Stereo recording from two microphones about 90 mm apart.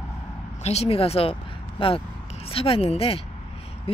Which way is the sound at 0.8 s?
90° left.